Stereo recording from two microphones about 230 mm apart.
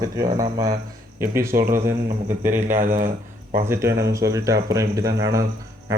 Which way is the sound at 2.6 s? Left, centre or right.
Right.